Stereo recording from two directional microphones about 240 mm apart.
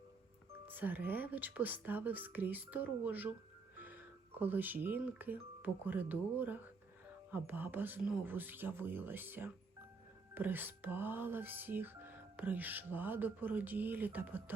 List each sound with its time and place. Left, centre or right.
0.6 s music: centre
3.8 s speech: centre
7.3 s music: centre